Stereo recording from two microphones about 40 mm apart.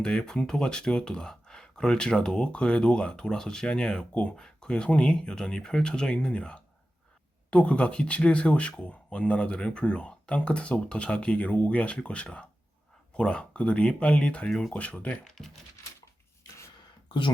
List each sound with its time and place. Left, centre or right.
0.0 s speech: centre
15.3 s speech: centre